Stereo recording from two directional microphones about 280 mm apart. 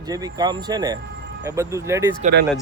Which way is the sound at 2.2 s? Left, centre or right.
Right.